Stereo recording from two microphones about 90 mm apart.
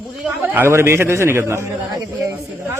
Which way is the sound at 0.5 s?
25° right (ahead or behind).